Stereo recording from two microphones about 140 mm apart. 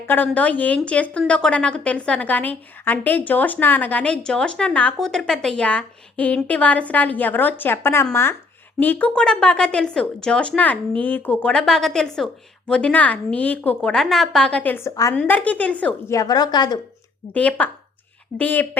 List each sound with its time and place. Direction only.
0.3 s a woman's voice: 10° left (ahead or behind)
16.1 s a woman's voice: 25° left (ahead or behind)
17.3 s a woman's voice: 10° left (ahead or behind)